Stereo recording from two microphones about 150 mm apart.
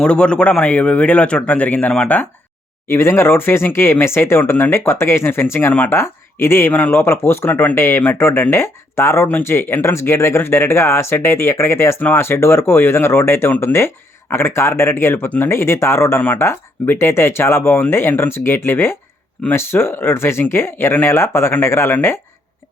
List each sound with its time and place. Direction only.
0.0 s speech: 5° left (ahead or behind)